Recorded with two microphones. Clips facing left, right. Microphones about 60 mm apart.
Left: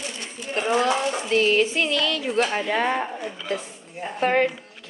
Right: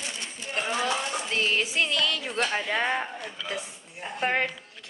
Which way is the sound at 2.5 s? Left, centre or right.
Centre.